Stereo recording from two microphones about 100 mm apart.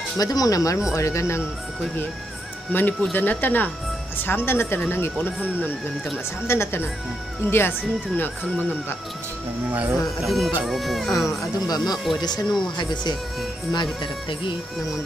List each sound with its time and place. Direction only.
0.2 s speech: 40° left (ahead or behind)
2.7 s speech: 20° left (ahead or behind)
9.7 s speech: 15° right (ahead or behind)
10.2 s speech: centre (ahead or behind)
11.2 s speech: 40° left (ahead or behind)